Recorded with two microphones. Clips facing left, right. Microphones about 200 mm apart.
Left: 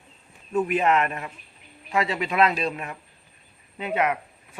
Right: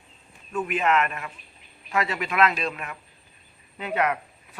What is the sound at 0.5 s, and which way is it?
A man's voice, 35° left (ahead or behind).